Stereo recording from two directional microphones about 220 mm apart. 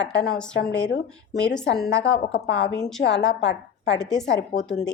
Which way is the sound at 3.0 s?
50° left (ahead or behind).